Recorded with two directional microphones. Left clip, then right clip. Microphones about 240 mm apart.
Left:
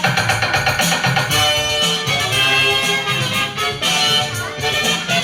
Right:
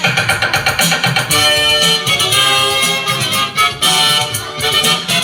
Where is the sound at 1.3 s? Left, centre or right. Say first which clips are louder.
Right 8 dB; right.